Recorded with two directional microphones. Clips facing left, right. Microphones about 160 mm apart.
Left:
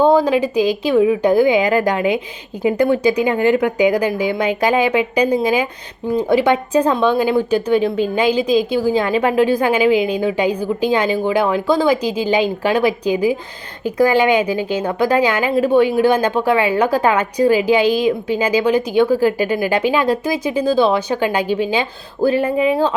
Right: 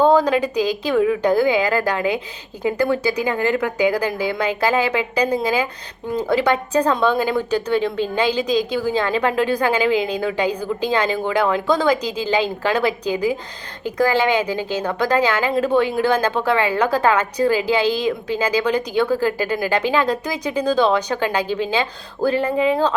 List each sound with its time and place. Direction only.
0.0 s a woman's voice: 5° left (ahead or behind)